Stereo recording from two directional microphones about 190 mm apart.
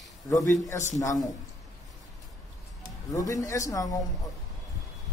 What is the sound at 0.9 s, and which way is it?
Speech, 20° left (ahead or behind).